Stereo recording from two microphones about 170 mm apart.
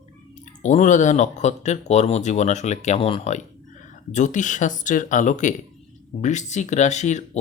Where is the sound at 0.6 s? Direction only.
45° left (ahead or behind).